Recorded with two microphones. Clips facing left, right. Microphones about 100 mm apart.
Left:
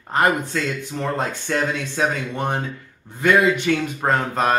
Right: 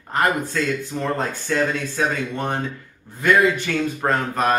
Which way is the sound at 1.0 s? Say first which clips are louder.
Even; 20° left (ahead or behind).